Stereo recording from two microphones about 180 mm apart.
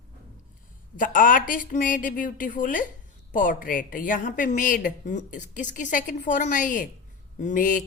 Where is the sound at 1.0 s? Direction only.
50° left (ahead or behind).